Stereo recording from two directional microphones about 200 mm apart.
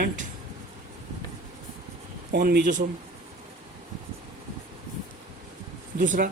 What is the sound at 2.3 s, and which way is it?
Speech, 55° right (ahead or behind).